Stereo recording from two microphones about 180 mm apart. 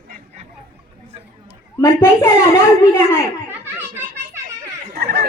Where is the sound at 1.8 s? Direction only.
15° left (ahead or behind).